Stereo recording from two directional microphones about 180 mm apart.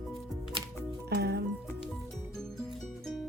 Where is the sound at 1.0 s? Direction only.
65° right (ahead or behind).